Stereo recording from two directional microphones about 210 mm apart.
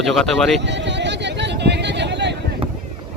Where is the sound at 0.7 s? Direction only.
55° right (ahead or behind).